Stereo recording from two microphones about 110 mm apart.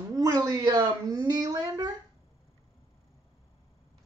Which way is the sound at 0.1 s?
35° right (ahead or behind).